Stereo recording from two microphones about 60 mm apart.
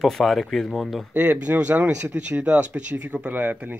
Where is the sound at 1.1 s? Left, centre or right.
Right.